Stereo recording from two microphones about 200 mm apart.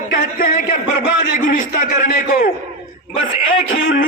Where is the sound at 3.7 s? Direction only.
80° left.